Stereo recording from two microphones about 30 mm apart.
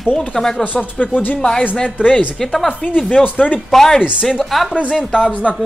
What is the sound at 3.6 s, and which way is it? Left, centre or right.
Speech, centre.